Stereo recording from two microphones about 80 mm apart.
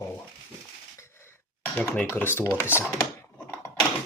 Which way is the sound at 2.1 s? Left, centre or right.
Left.